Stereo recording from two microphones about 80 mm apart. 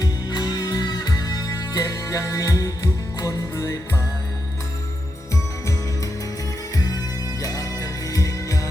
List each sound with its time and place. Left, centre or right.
0.0 s music: left
6.7 s music: left